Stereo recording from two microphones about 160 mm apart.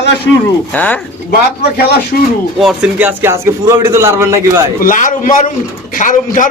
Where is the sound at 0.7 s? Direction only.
10° left (ahead or behind).